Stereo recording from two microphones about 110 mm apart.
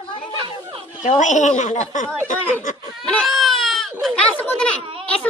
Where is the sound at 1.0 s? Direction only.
90° left.